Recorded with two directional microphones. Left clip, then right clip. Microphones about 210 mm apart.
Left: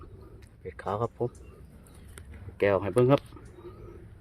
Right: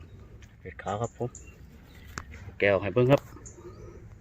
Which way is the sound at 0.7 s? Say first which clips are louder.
Left 1 dB; 5° left (ahead or behind).